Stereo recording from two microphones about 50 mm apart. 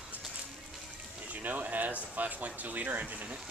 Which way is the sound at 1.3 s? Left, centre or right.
Right.